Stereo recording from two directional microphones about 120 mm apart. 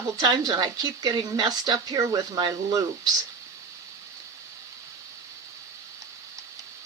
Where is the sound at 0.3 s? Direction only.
35° right (ahead or behind).